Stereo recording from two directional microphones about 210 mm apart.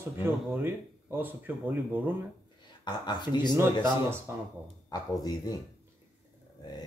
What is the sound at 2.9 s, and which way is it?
Speech, 20° left (ahead or behind).